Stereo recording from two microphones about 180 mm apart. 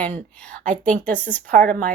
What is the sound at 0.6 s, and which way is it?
Speech, 45° right (ahead or behind).